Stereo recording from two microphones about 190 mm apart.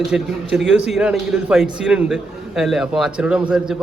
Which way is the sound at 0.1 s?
5° right (ahead or behind).